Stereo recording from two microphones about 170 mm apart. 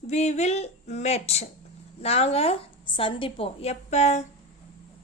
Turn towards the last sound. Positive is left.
turn(degrees=40)  # may be behind; listen again after turning